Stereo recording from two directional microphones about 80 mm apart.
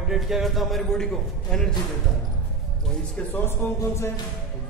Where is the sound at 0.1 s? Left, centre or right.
Centre.